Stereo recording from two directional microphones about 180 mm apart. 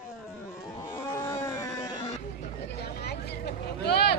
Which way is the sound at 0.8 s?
15° left (ahead or behind).